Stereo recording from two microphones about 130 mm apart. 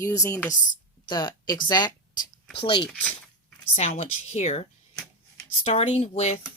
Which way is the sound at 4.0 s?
60° left (ahead or behind).